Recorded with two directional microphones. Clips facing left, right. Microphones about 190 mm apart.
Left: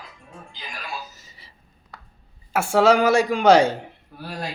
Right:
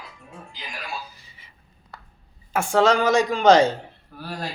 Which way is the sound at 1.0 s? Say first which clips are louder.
Left 1 dB; 40° left (ahead or behind).